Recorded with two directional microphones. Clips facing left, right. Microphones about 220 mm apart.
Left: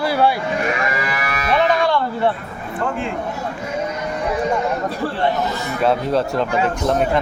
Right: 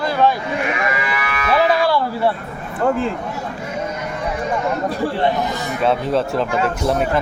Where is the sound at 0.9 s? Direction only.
40° left (ahead or behind).